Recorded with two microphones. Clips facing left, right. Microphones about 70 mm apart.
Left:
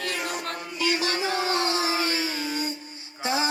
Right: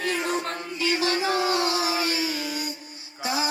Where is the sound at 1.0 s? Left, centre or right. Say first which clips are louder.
Right 2 dB; right.